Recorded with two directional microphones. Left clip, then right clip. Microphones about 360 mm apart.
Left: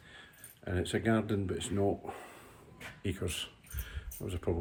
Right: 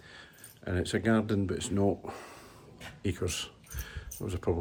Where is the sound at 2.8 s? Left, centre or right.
Centre.